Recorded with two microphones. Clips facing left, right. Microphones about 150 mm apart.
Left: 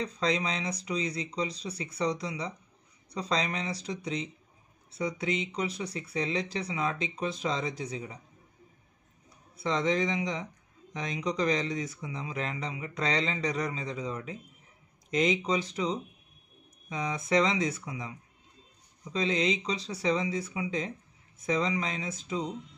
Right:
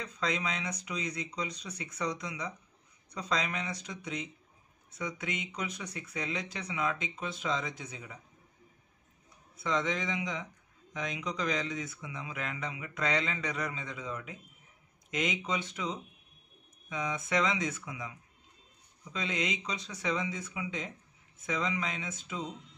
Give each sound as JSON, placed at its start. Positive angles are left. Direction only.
{"t": 0.0, "sound": "speech", "side_deg": 35}
{"t": 9.6, "sound": "speech", "side_deg": 35}